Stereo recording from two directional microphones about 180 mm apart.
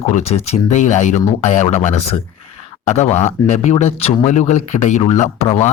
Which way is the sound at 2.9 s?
40° left (ahead or behind).